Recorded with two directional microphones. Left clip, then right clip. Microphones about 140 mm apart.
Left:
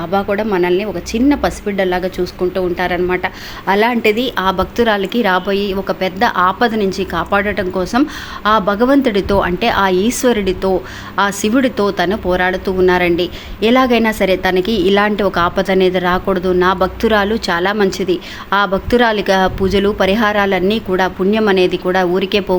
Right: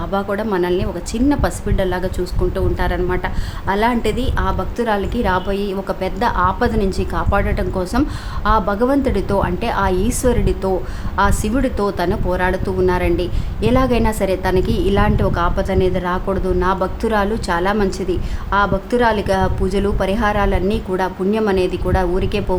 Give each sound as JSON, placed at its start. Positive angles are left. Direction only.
{"t": 0.1, "sound": "a woman's voice", "side_deg": 10}
{"t": 4.4, "sound": "a woman's voice", "side_deg": 30}